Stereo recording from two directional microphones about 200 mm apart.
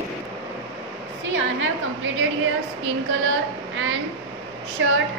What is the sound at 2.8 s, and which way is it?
Female singing, 75° right (ahead or behind).